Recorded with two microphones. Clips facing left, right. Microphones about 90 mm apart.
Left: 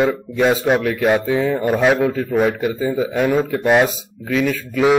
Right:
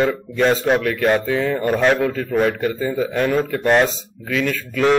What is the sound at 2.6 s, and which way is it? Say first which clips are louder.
Speech: left 1 dB; 15° left (ahead or behind).